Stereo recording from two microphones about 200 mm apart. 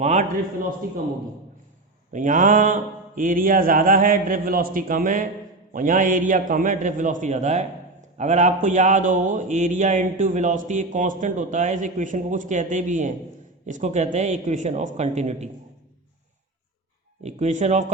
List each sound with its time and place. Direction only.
0.0 s speech: 35° right (ahead or behind)
2.1 s mantra: 40° right (ahead or behind)
5.7 s speech: 40° right (ahead or behind)
17.2 s speech: 35° right (ahead or behind)